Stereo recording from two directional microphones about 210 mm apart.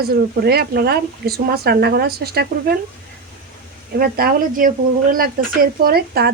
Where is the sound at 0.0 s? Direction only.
50° right (ahead or behind).